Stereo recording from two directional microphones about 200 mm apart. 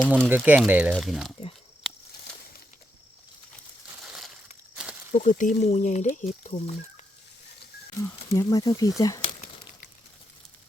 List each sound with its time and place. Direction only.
0.3 s speech: 10° right (ahead or behind)
5.1 s speech: 40° left (ahead or behind)
7.9 s speech: 15° left (ahead or behind)